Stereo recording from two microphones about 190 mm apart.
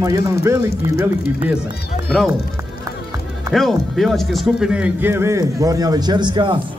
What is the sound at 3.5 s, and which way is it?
A man's voice, centre (ahead or behind).